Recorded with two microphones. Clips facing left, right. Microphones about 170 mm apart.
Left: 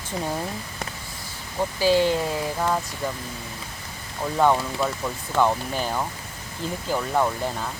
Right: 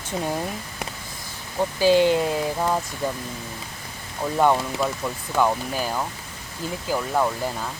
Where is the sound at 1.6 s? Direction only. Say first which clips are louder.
Right 2 dB; 15° right (ahead or behind).